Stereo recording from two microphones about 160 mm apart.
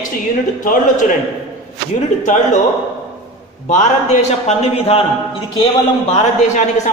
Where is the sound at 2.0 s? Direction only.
50° left (ahead or behind).